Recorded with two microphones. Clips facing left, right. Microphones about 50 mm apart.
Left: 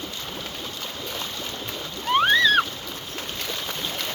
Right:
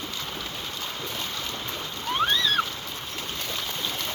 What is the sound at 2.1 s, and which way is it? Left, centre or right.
Vehicle, left.